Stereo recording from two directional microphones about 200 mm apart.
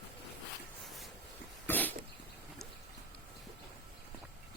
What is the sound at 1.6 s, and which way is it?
Cough, 10° left (ahead or behind).